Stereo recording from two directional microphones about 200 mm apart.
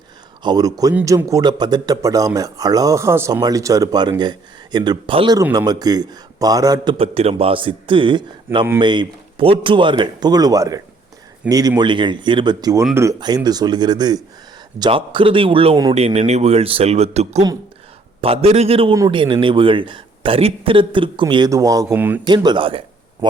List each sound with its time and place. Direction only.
0.4 s speech: 20° right (ahead or behind)
22.3 s speech: 25° right (ahead or behind)